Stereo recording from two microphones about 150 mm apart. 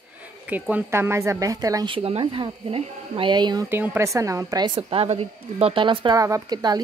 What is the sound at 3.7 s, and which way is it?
A woman's voice, 15° right (ahead or behind).